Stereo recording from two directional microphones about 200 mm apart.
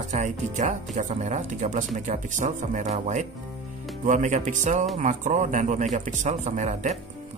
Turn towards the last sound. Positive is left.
turn(degrees=-35)  # may be behind; listen again after turning